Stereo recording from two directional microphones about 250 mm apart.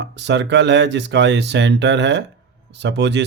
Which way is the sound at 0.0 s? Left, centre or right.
Right.